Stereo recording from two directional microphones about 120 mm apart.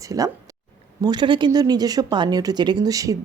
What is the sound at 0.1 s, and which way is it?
Speech, 30° right (ahead or behind).